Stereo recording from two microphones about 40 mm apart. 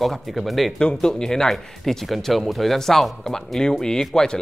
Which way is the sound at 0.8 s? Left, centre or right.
Left.